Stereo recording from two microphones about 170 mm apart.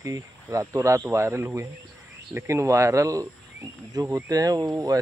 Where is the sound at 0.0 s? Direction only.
20° right (ahead or behind).